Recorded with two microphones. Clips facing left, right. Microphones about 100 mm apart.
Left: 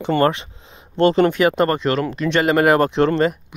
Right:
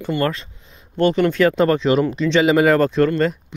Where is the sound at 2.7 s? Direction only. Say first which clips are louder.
Even; 10° left (ahead or behind).